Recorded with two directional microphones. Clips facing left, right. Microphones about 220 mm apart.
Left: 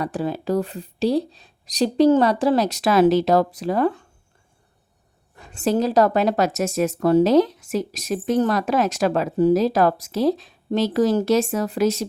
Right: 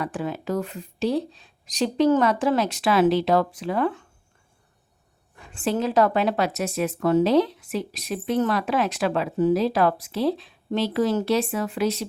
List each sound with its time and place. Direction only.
0.0 s speech: 35° left (ahead or behind)
5.4 s a woman's voice: 40° left (ahead or behind)